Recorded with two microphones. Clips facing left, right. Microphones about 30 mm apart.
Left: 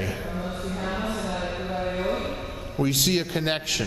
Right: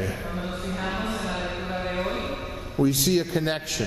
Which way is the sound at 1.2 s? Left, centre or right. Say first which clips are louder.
Even; centre.